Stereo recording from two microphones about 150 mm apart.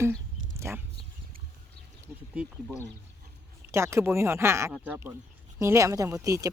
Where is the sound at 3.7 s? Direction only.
20° right (ahead or behind).